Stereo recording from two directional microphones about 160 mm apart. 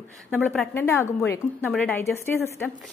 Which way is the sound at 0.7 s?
15° left (ahead or behind).